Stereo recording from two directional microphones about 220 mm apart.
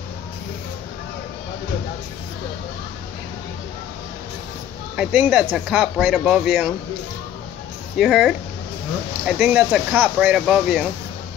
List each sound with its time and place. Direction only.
4.9 s speech: 5° right (ahead or behind)
8.0 s speech: centre (ahead or behind)